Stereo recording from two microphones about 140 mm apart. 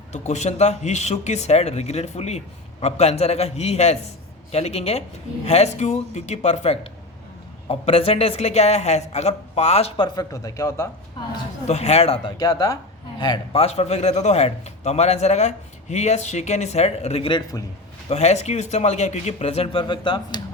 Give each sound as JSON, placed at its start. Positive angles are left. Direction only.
{"t": 0.1, "sound": "a man's voice", "side_deg": 55}
{"t": 10.0, "sound": "speech", "side_deg": 25}
{"t": 11.6, "sound": "a man's voice", "side_deg": 50}
{"t": 12.4, "sound": "speech", "side_deg": 25}
{"t": 13.6, "sound": "a man's voice", "side_deg": 50}
{"t": 17.5, "sound": "speech", "side_deg": 25}
{"t": 18.1, "sound": "a man's voice", "side_deg": 50}